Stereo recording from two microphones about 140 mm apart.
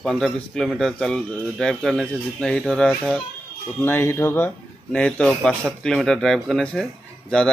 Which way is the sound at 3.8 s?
15° left (ahead or behind).